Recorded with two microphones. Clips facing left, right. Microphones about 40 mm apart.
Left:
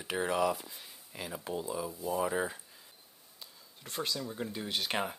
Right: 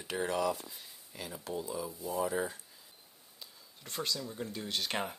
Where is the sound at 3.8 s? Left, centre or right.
Centre.